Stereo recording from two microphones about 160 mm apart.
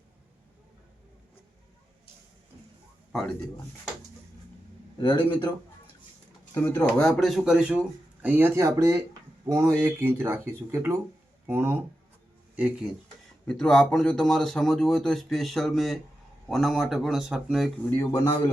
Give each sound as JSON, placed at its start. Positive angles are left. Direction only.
{"t": 4.9, "sound": "speech", "side_deg": 30}
{"t": 6.5, "sound": "speech", "side_deg": 15}
{"t": 13.5, "sound": "speech", "side_deg": 5}
{"t": 17.9, "sound": "speech", "side_deg": 20}